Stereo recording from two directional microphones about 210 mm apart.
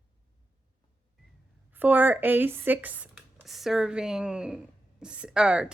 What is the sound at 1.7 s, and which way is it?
Speech, 10° right (ahead or behind).